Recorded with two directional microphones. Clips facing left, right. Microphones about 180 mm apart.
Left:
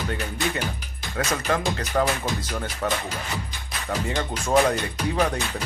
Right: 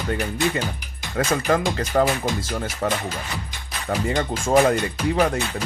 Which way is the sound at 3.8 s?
35° right (ahead or behind).